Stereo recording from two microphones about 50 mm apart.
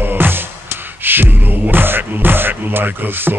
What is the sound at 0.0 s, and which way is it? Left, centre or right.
Music, right.